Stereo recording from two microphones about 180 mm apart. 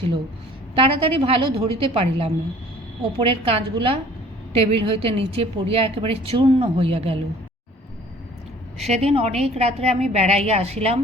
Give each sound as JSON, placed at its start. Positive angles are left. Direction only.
{"t": 0.8, "sound": "a woman's voice", "side_deg": -30}
{"t": 8.9, "sound": "a woman's voice", "side_deg": -35}